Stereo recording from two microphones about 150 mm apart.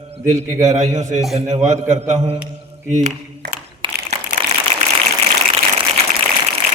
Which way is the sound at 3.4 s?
90° right.